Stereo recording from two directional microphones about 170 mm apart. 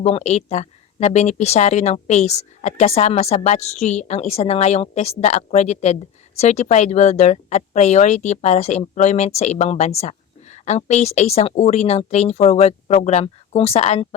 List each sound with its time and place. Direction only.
0.0 s speech: 40° left (ahead or behind)